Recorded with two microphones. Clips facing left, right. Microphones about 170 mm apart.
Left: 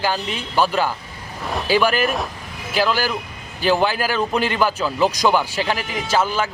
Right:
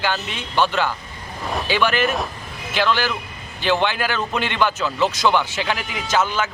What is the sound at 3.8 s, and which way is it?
Speech, 35° left (ahead or behind).